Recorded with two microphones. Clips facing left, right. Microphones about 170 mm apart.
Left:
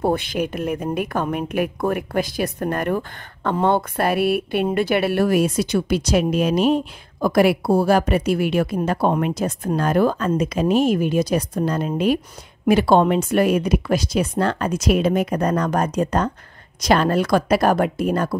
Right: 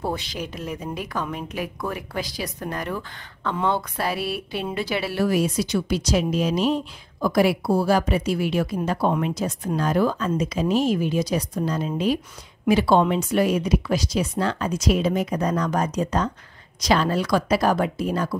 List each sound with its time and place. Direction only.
0.0 s speech: 55° left (ahead or behind)